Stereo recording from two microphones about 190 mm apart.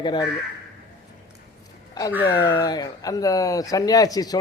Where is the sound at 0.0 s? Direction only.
25° left (ahead or behind).